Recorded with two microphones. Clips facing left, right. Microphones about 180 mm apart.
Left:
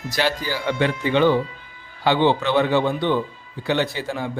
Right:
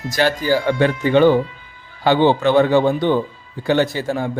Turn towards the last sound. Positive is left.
turn(degrees=-45)  # may be behind; listen again after turning